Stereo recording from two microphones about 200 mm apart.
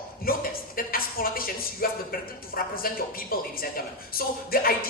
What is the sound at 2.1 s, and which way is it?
Music, 45° left (ahead or behind).